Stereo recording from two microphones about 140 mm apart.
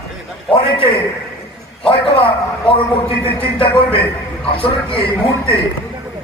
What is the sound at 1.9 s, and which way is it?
A man's voice, 40° left (ahead or behind).